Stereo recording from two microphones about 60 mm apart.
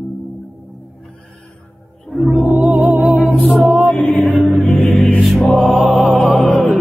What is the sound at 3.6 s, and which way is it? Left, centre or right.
Chant, right.